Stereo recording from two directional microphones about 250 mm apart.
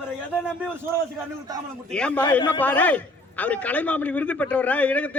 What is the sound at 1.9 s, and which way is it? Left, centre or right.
A man's voice, centre.